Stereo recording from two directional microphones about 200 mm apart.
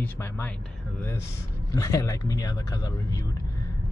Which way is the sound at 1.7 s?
15° left (ahead or behind).